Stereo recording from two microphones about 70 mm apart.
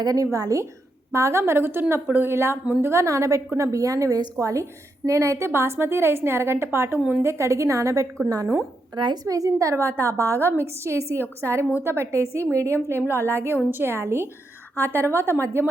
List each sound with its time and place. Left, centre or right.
0.0 s a woman's voice: right
9.2 s a woman's voice: right